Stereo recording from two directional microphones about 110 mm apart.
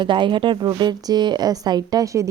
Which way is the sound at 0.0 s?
45° right (ahead or behind).